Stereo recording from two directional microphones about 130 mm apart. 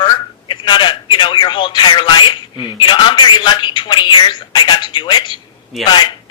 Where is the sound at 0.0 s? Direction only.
35° left (ahead or behind).